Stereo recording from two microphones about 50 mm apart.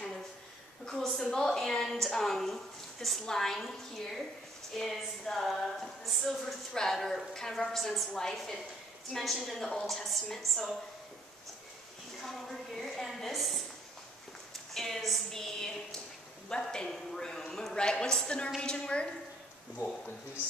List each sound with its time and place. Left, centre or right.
0.8 s a sound: centre
1.2 s a woman's voice: centre
8.1 s a woman's voice: centre
12.2 s a woman's voice: centre
14.7 s a woman's voice: centre